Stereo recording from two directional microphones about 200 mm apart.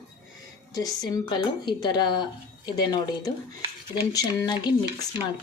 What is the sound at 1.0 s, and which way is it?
Speech, 20° left (ahead or behind).